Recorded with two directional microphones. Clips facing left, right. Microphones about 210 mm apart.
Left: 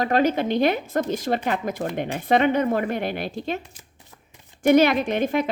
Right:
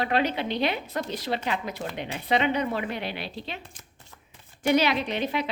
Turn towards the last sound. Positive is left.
turn(degrees=50)  # may be behind; listen again after turning